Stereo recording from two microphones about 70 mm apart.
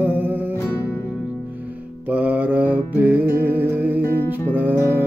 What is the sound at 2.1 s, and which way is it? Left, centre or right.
Mantra, right.